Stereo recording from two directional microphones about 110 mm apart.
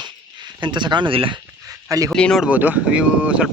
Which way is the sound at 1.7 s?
30° right (ahead or behind).